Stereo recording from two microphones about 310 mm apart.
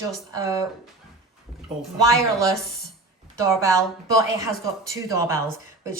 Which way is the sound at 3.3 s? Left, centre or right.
Centre.